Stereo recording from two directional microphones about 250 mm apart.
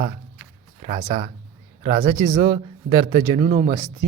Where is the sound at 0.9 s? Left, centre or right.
Right.